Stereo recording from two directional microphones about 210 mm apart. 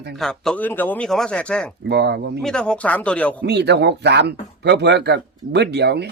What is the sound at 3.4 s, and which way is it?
Speech, 55° right (ahead or behind).